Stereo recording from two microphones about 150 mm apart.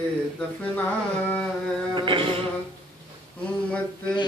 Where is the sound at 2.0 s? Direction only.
35° right (ahead or behind).